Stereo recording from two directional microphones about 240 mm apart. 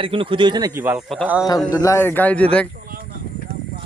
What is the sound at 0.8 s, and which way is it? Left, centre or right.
Speech, centre.